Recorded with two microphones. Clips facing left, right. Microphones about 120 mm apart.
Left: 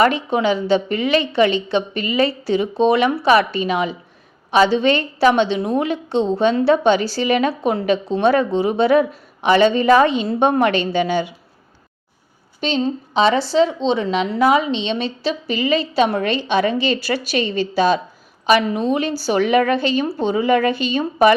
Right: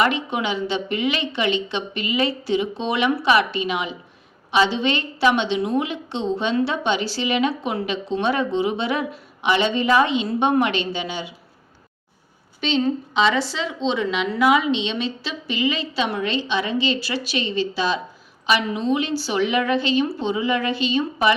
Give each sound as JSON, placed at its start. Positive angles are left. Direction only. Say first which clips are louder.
{"t": 0.0, "sound": "a woman's voice", "louder": "left 5 dB", "side_deg": 40}
{"t": 12.5, "sound": "a woman's voice", "louder": "left 1 dB", "side_deg": 40}